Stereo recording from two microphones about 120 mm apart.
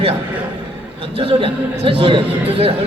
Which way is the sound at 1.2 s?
45° right (ahead or behind).